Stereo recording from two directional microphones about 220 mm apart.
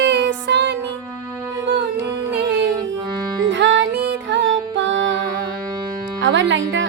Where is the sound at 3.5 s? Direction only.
55° right (ahead or behind).